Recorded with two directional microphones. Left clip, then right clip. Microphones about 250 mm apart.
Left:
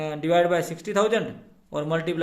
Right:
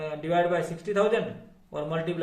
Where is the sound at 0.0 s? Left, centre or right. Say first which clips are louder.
Left 4 dB; left.